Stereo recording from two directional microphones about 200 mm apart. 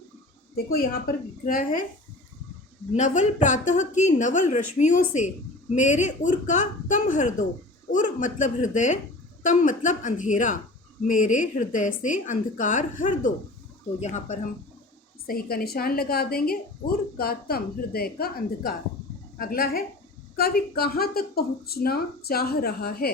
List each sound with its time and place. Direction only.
0.5 s a woman's voice: 50° left (ahead or behind)
2.9 s a woman's voice: 35° left (ahead or behind)
15.3 s a woman's voice: 50° left (ahead or behind)